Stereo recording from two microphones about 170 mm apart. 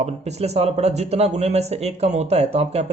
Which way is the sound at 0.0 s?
40° right (ahead or behind).